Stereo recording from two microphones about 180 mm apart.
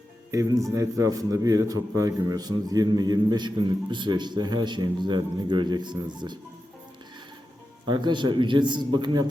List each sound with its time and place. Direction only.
0.3 s a man's voice: 20° right (ahead or behind)
7.9 s a man's voice: 25° right (ahead or behind)